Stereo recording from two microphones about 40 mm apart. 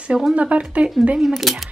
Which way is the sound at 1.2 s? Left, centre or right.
Centre.